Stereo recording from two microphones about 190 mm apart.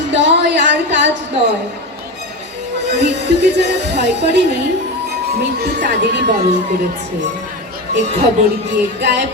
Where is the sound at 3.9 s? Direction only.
65° right (ahead or behind).